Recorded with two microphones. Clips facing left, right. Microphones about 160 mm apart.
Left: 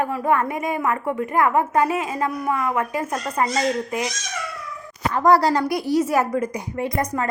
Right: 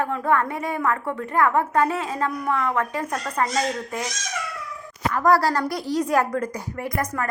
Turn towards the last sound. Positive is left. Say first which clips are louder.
# left 3 dB
turn(degrees=20)  # may be behind; listen again after turning